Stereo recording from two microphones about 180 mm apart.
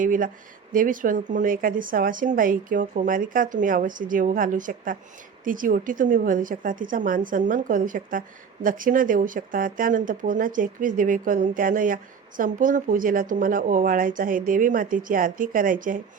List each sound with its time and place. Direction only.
0.0 s speech: 50° right (ahead or behind)